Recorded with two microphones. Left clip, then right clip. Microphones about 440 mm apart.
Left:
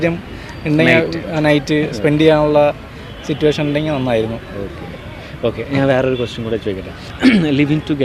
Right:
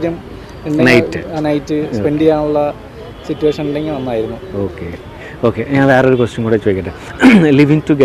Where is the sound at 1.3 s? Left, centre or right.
Left.